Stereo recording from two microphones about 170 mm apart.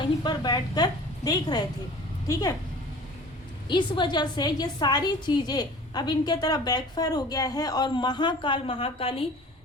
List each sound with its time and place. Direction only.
0.2 s a woman's voice: 25° left (ahead or behind)
3.7 s a woman's voice: 25° left (ahead or behind)